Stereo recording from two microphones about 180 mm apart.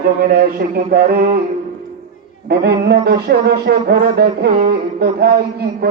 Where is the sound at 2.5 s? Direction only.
65° right (ahead or behind).